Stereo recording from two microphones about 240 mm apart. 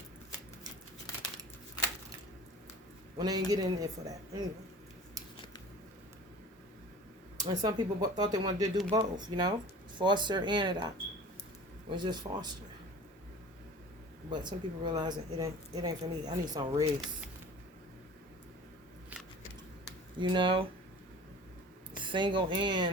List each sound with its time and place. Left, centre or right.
3.2 s speech: centre
7.4 s speech: right
14.3 s speech: centre
20.1 s speech: centre
22.0 s speech: centre